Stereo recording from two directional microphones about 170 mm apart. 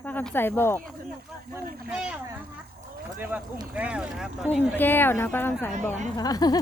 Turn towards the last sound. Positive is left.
turn(degrees=20)  # may be behind; listen again after turning